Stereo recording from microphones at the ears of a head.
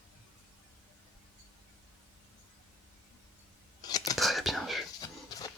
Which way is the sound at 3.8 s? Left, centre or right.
Left.